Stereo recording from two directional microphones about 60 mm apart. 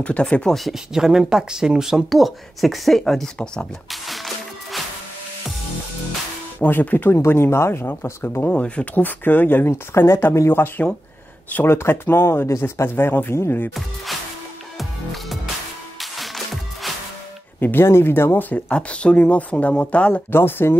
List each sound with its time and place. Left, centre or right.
0.0 s speech: centre
0.7 s speech: centre
3.9 s music: centre
6.6 s speech: left
7.2 s speech: left
8.5 s speech: left
9.7 s speech: left
11.6 s speech: left
16.0 s music: centre
17.6 s speech: left
20.2 s speech: left